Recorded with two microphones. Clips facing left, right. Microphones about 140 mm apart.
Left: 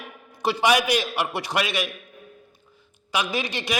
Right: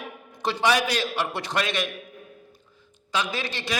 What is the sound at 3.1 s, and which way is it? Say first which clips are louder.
Speech: left 2 dB; 15° left (ahead or behind).